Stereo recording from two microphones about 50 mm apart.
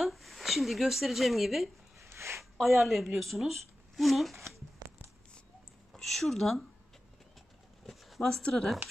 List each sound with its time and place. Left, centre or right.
0.0 s speech: centre
2.0 s a sound: right
2.5 s speech: centre
5.9 s speech: centre
7.8 s a sound: centre
8.4 s speech: left